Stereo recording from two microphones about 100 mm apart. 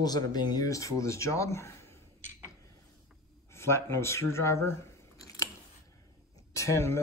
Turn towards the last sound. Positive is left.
turn(degrees=25)  # may be behind; listen again after turning